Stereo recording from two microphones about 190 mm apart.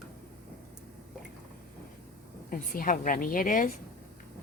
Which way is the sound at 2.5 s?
45° left (ahead or behind).